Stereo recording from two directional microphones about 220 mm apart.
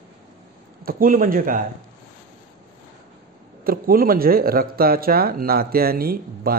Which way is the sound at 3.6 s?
40° right (ahead or behind).